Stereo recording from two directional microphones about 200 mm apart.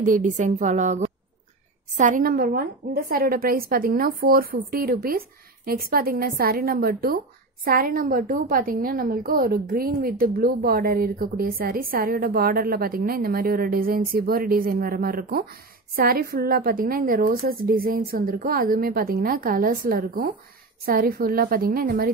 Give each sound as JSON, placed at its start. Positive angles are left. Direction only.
{"t": 0.0, "sound": "a woman's voice", "side_deg": -40}